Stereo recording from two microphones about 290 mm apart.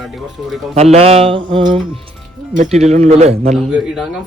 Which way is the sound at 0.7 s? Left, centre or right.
Right.